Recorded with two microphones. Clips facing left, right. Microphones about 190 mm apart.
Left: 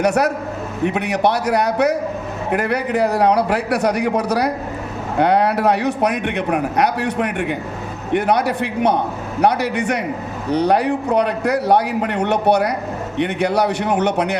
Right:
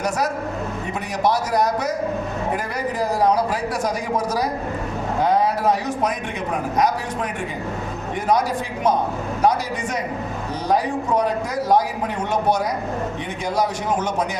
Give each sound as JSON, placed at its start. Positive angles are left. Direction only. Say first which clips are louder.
{"t": 0.0, "sound": "a man's voice", "louder": "left 6 dB", "side_deg": 65}